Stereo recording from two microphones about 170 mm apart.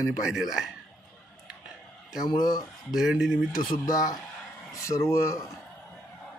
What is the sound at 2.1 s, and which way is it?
Speech, 25° left (ahead or behind).